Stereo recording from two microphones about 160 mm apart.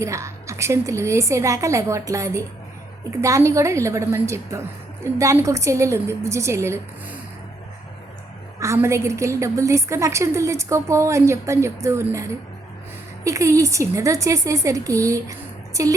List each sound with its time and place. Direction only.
0.0 s a woman's voice: 20° right (ahead or behind)
8.5 s a woman's voice: 20° right (ahead or behind)